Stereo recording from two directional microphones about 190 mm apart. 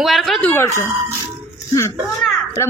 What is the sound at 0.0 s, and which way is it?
Speech, centre (ahead or behind).